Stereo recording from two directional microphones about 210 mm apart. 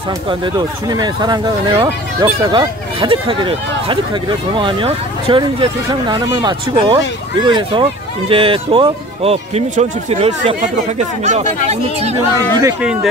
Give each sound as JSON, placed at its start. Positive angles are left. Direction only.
{"t": 0.8, "sound": "speech", "side_deg": -20}
{"t": 12.4, "sound": "speech", "side_deg": -15}